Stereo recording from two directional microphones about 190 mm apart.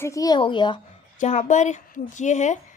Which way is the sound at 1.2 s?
40° left (ahead or behind).